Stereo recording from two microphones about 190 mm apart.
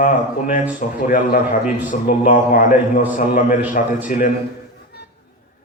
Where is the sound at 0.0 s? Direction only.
40° left (ahead or behind).